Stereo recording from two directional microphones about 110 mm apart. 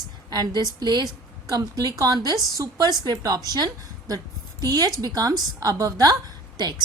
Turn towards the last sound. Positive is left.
turn(degrees=-40)  # may be behind; listen again after turning